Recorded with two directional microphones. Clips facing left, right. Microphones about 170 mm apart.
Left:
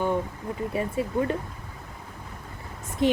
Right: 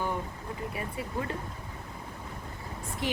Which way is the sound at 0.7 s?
25° left (ahead or behind).